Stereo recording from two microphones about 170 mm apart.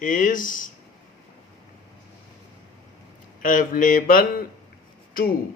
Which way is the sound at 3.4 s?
50° left (ahead or behind).